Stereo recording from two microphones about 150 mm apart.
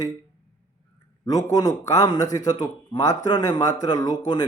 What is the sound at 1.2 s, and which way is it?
A man's voice, 25° left (ahead or behind).